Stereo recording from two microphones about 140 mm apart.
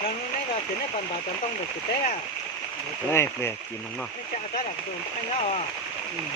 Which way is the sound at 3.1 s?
20° left (ahead or behind).